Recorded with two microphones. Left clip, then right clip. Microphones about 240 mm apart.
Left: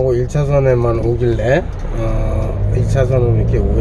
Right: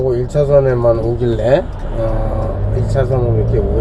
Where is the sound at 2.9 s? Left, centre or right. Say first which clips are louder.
Left 1 dB; centre.